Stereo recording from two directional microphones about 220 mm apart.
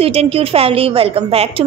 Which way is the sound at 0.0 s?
25° right (ahead or behind).